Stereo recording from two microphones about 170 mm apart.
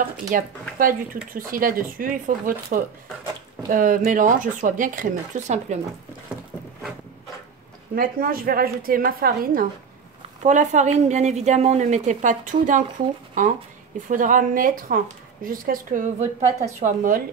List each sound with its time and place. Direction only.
0.3 s a woman's voice: 55° right (ahead or behind)
7.9 s speech: 60° right (ahead or behind)
10.4 s a woman's voice: 45° right (ahead or behind)